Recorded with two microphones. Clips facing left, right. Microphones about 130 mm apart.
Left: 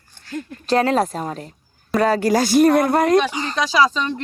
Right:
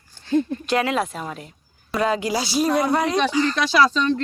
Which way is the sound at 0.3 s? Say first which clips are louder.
Right 10 dB; 25° right (ahead or behind).